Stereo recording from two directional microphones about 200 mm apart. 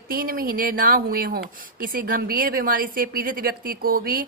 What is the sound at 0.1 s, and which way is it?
A woman's voice, 45° right (ahead or behind).